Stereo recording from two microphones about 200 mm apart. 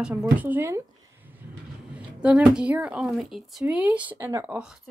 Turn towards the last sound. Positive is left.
turn(degrees=-10)  # may be behind; listen again after turning